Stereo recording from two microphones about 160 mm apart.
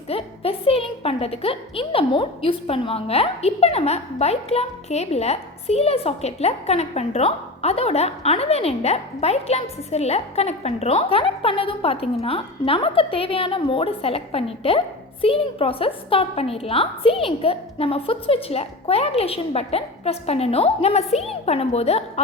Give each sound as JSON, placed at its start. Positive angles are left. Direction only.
{"t": 0.1, "sound": "a woman's voice", "side_deg": 35}